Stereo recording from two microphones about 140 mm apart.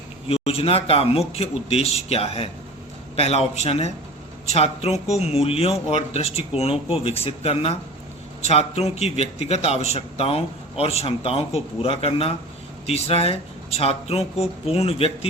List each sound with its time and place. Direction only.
0.3 s a man's voice: 45° left (ahead or behind)